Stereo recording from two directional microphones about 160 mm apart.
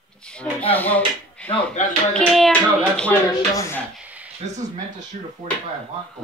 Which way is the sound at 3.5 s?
20° left (ahead or behind).